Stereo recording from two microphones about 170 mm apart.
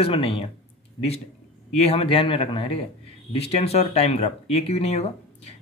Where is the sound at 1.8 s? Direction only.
35° left (ahead or behind).